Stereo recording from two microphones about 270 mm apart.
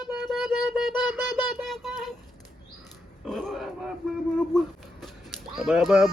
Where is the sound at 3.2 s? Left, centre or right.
Centre.